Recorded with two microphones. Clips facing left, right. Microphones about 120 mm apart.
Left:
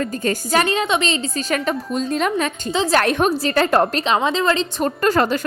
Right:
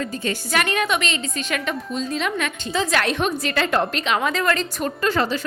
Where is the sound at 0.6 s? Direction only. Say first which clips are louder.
Left 3 dB; 25° left (ahead or behind); by 2.5 s 45° left (ahead or behind).